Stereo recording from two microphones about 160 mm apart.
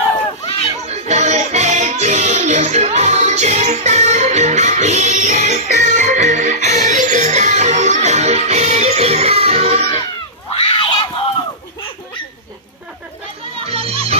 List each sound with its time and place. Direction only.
0.8 s music: 45° right (ahead or behind)
10.5 s a sound: 35° left (ahead or behind)
13.7 s music: 40° right (ahead or behind)